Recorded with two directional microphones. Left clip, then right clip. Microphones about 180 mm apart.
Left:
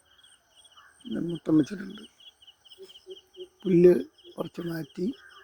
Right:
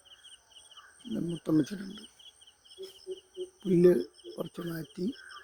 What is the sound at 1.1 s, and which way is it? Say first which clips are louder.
Speech: left 4 dB; 15° left (ahead or behind).